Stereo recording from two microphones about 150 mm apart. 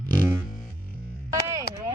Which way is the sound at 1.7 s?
90° left.